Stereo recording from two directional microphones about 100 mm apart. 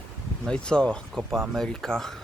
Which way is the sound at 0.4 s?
10° left (ahead or behind).